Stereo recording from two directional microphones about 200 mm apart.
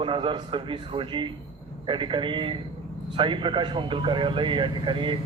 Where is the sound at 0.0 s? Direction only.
25° right (ahead or behind).